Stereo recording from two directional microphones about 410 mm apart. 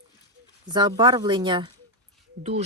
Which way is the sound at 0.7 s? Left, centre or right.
Centre.